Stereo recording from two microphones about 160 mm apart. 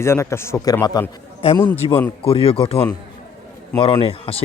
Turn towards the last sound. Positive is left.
turn(degrees=35)  # may be behind; listen again after turning